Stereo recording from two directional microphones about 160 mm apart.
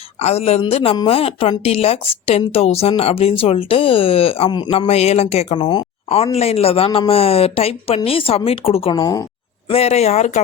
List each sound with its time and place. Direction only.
0.2 s speech: 40° left (ahead or behind)
4.9 s speech: 40° left (ahead or behind); by 9.2 s 25° left (ahead or behind)
9.6 s speech: 40° left (ahead or behind)